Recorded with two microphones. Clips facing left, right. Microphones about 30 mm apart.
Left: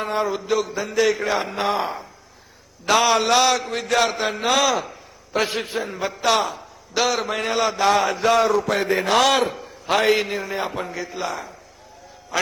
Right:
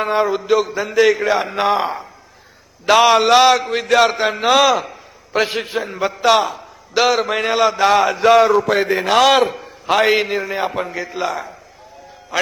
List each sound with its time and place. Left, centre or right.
0.0 s a man's voice: right
0.9 s a man's voice: centre